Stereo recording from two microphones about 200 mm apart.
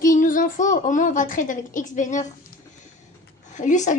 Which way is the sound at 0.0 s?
40° left (ahead or behind).